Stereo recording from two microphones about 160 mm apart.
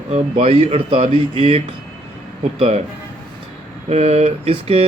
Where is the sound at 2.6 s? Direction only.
40° right (ahead or behind).